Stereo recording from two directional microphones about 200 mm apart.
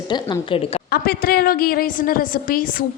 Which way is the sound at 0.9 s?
50° left (ahead or behind).